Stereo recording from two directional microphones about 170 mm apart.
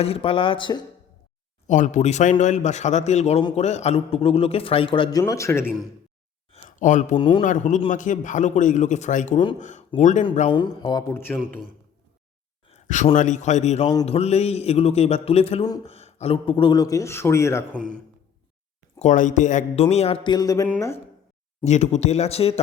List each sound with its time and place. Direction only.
0.0 s a man's voice: 35° left (ahead or behind)
1.6 s a man's voice: 45° left (ahead or behind); by 5.2 s 30° left (ahead or behind)
5.2 s speech: 15° left (ahead or behind)
6.5 s a sound: 50° left (ahead or behind)
7.2 s a man's voice: 30° left (ahead or behind)
7.4 s a man's voice: 45° left (ahead or behind)
10.5 s speech: 25° left (ahead or behind)
12.7 s a sound: 45° left (ahead or behind)
13.1 s a man's voice: 45° left (ahead or behind); by 17.8 s 15° left (ahead or behind)
18.9 s a man's voice: 45° left (ahead or behind); by 21.0 s 15° left (ahead or behind)
21.6 s a man's voice: 40° left (ahead or behind)